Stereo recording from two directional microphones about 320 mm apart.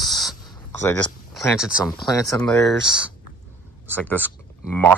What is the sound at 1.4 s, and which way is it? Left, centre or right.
Speech, centre.